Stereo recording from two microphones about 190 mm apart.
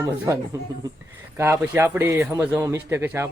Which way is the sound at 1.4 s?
15° right (ahead or behind).